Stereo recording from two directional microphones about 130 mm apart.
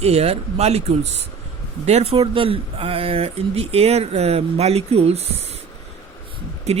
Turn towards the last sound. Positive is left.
turn(degrees=-55)  # may be behind; listen again after turning